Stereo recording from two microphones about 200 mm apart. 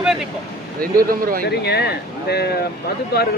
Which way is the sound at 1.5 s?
55° left (ahead or behind).